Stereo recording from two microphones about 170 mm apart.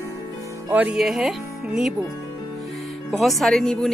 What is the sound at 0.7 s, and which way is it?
Speech, 10° right (ahead or behind).